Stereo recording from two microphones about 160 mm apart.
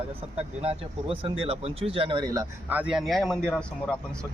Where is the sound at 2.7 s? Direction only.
5° right (ahead or behind).